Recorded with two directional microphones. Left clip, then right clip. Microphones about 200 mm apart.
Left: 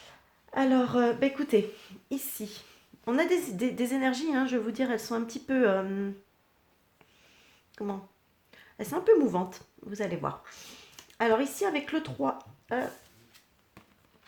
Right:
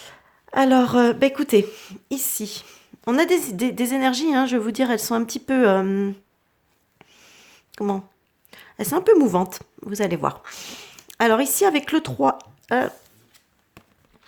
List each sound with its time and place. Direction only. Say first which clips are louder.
0.5 s speech: right 9 dB; 50° right (ahead or behind)
7.0 s a sound: right 10 dB; 45° right (ahead or behind)
8.4 s a woman's voice: right 10 dB; 45° right (ahead or behind)